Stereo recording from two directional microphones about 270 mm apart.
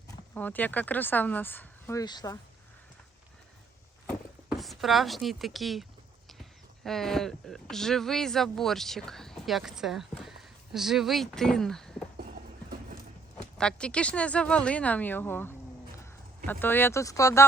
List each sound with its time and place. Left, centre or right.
0.3 s speech: centre
4.4 s speech: centre
12.1 s clip-clop: right
13.6 s speech: centre